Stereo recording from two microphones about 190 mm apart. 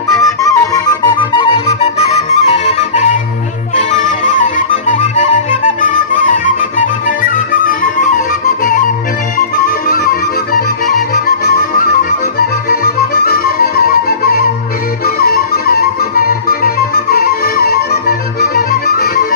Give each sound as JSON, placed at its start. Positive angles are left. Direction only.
{"t": 0.4, "sound": "flute", "side_deg": 15}
{"t": 3.7, "sound": "music", "side_deg": 40}
{"t": 9.8, "sound": "flute", "side_deg": 50}
{"t": 15.0, "sound": "music", "side_deg": 50}